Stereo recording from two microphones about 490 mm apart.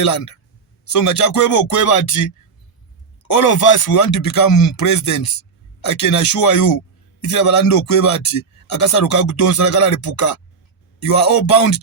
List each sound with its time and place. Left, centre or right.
0.9 s speech: left
3.2 s speech: left